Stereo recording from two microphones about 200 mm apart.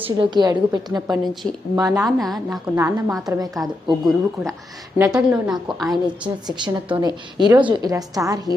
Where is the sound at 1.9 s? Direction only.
Centre (ahead or behind).